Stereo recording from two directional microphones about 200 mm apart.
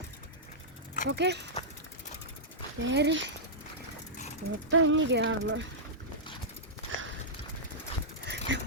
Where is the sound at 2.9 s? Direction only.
60° right (ahead or behind).